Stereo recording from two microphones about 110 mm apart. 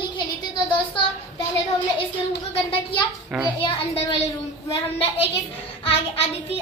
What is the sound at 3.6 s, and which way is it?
Speech, 65° left (ahead or behind).